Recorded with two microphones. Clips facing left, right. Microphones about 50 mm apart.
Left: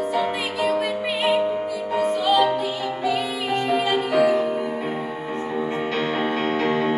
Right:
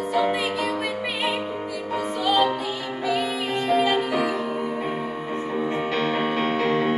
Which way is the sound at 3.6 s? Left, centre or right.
Centre.